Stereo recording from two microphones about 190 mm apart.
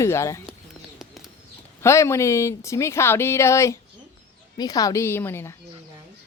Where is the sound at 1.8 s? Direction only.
15° left (ahead or behind).